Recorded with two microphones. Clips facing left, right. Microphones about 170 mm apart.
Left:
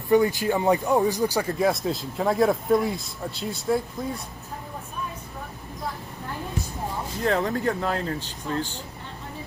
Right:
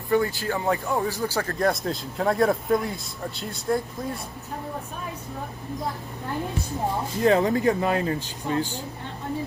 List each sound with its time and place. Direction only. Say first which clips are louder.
0.1 s speech: left 3 dB; 20° left (ahead or behind)
1.6 s speech: even; centre (ahead or behind)
7.2 s speech: right 4 dB; 15° right (ahead or behind)